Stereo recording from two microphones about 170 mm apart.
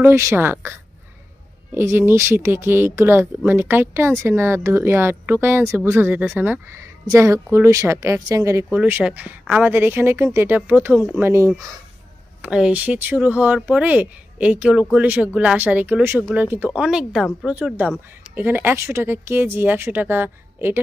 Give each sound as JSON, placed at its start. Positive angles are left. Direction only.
{"t": 0.0, "sound": "speech", "side_deg": -15}